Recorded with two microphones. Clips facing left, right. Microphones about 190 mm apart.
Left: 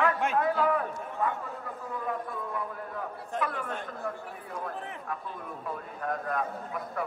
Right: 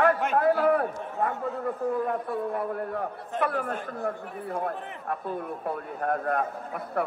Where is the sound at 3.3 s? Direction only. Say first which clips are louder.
Right 5 dB; 60° right (ahead or behind).